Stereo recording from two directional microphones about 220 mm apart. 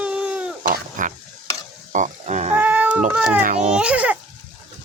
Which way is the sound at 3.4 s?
35° right (ahead or behind).